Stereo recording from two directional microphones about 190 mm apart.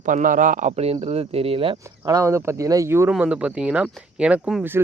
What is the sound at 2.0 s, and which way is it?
Speech, 15° right (ahead or behind).